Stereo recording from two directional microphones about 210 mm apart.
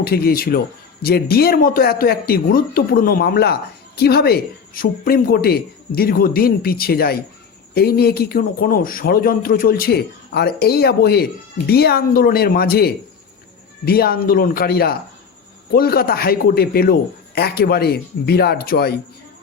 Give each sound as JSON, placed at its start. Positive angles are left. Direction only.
{"t": 0.0, "sound": "speech", "side_deg": 45}